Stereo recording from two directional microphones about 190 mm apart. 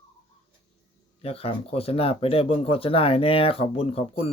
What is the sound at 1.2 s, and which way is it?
Speech, 30° left (ahead or behind).